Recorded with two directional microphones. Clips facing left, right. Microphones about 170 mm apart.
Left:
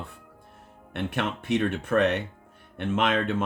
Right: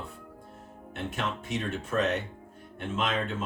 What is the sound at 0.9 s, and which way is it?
Speech, 65° left (ahead or behind).